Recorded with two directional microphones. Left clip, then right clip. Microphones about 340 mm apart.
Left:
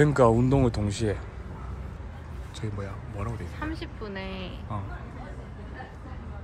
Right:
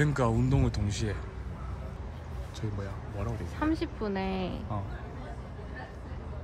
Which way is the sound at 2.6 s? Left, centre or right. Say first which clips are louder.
Left 3 dB; centre.